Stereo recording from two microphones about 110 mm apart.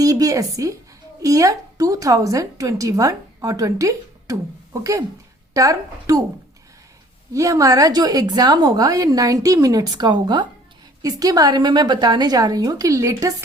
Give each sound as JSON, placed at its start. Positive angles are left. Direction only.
{"t": 0.0, "sound": "a woman's voice", "side_deg": -35}
{"t": 7.3, "sound": "a woman's voice", "side_deg": -30}